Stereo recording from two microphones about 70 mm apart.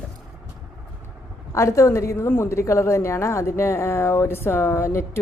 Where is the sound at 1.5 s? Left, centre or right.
Left.